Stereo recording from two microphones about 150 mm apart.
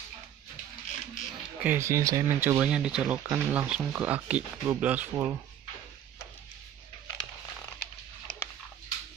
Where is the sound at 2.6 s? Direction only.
5° right (ahead or behind).